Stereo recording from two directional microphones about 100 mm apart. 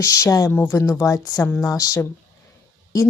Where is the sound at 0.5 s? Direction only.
20° left (ahead or behind).